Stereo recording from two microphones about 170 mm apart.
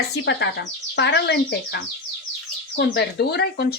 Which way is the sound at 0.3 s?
90° left.